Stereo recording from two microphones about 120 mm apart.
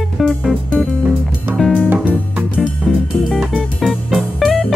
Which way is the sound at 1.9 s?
15° right (ahead or behind).